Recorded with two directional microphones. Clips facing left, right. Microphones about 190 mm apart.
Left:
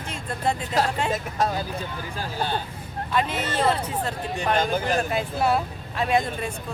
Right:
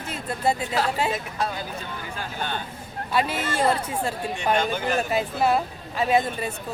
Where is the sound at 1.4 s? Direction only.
40° left (ahead or behind).